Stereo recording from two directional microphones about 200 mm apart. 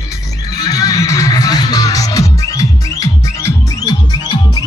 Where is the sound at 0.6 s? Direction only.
20° left (ahead or behind).